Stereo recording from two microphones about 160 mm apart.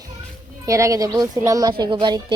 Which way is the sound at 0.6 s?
20° right (ahead or behind).